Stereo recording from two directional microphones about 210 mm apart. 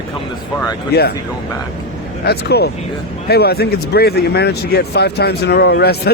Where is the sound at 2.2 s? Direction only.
50° left (ahead or behind).